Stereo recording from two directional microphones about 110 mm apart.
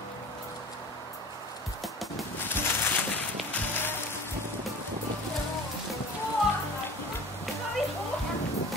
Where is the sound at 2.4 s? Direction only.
20° left (ahead or behind).